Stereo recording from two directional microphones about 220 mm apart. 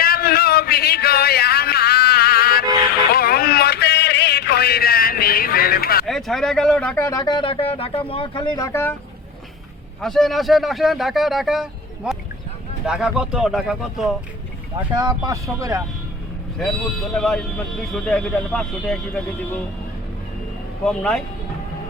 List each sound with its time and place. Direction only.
0.0 s a sound: 45° left (ahead or behind)
6.1 s speech: centre (ahead or behind)
10.0 s speech: centre (ahead or behind)
14.9 s speech: 15° right (ahead or behind)
16.6 s speech: centre (ahead or behind)
20.8 s speech: 5° left (ahead or behind)